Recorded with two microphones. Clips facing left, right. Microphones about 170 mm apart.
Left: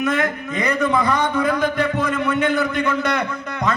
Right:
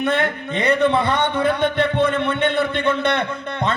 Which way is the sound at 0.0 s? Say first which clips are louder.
Even; 30° right (ahead or behind).